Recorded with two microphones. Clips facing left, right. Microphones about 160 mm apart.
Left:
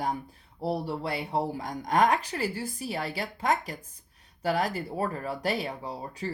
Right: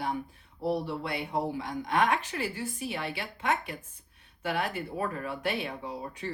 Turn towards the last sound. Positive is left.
turn(degrees=35)  # may be behind; listen again after turning